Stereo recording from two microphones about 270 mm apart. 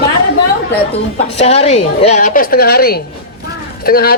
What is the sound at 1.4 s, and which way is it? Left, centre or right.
A woman's voice, left.